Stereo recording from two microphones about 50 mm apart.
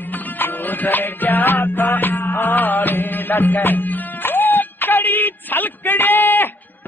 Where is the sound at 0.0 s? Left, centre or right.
Left.